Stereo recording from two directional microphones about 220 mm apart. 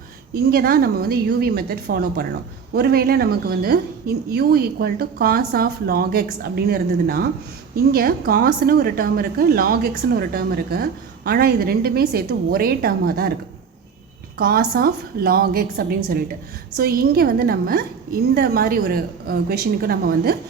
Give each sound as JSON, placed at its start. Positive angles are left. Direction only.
{"t": 0.3, "sound": "a woman's voice", "side_deg": -40}
{"t": 14.3, "sound": "a woman's voice", "side_deg": -45}